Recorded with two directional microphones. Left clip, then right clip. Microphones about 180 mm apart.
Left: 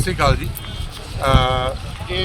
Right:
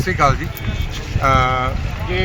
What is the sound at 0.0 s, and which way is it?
A man's voice, 35° left (ahead or behind).